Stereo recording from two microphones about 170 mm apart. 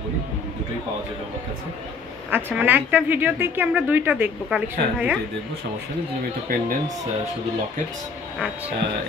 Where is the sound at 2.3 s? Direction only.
10° right (ahead or behind).